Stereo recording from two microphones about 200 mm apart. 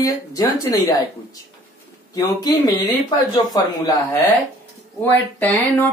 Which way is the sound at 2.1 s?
20° left (ahead or behind).